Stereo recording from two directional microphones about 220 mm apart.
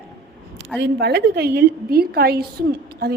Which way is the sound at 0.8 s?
50° right (ahead or behind).